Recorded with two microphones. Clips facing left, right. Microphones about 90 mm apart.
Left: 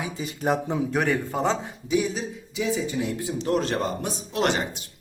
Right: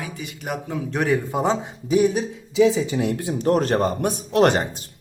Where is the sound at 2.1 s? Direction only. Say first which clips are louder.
Right 6 dB; 90° right; by 3.5 s 60° right (ahead or behind).